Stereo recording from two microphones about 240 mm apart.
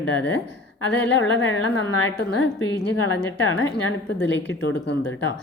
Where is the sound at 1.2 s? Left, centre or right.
Left.